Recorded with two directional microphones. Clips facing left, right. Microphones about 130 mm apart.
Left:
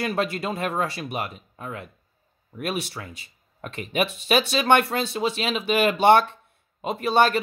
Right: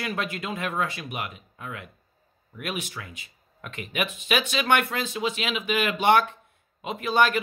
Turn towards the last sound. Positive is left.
turn(degrees=35)  # may be behind; listen again after turning